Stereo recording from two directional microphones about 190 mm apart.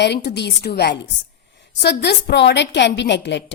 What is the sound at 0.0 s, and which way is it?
A woman's voice, 65° left (ahead or behind).